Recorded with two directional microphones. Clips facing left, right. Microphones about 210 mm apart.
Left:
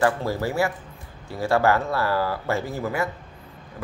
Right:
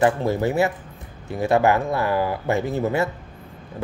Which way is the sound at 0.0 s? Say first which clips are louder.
Right 3 dB; 20° right (ahead or behind).